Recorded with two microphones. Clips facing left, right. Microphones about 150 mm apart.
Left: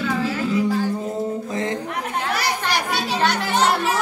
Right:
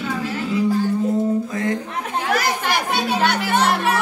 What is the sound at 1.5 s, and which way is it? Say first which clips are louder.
Speech: right 2 dB; 25° left (ahead or behind).